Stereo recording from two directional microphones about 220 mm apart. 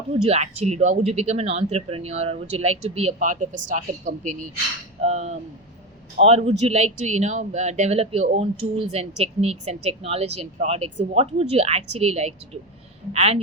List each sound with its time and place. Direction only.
0.1 s a man's voice: 30° right (ahead or behind)